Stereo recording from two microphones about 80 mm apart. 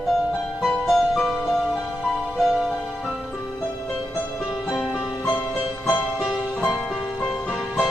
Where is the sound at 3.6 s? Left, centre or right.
Left.